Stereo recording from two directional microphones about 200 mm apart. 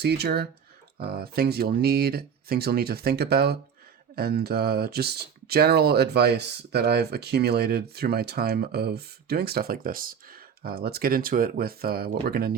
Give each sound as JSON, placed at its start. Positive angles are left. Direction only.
{"t": 0.0, "sound": "speech", "side_deg": -55}